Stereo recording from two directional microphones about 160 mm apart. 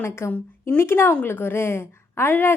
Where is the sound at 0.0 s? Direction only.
15° left (ahead or behind).